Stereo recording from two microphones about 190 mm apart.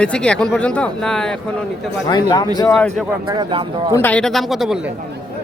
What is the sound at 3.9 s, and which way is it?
Speech, 10° left (ahead or behind).